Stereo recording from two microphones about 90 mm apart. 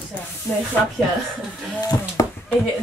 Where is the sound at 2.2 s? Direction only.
35° left (ahead or behind).